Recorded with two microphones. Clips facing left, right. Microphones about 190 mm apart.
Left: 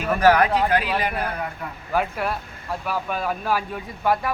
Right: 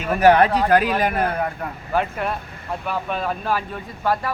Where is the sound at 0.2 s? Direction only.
25° right (ahead or behind).